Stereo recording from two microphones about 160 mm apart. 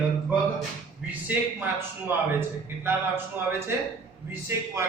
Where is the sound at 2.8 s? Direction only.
15° right (ahead or behind).